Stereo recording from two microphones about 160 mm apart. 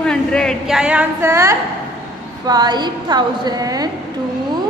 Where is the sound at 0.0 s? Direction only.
5° left (ahead or behind); by 3.9 s 25° right (ahead or behind).